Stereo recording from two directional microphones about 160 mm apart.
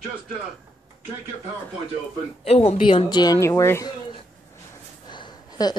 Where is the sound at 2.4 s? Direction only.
40° left (ahead or behind); by 3.9 s 20° left (ahead or behind).